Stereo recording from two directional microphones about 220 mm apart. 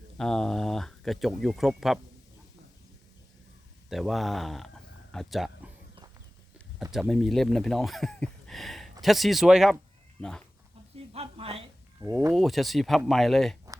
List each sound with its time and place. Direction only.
0.2 s speech: centre (ahead or behind)
3.8 s speech: centre (ahead or behind)
6.9 s speech: centre (ahead or behind)
11.1 s a woman's voice: 25° right (ahead or behind)
11.9 s speech: 15° right (ahead or behind)
12.4 s speech: centre (ahead or behind)